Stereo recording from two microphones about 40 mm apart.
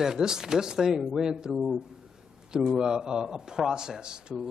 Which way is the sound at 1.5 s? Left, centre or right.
Centre.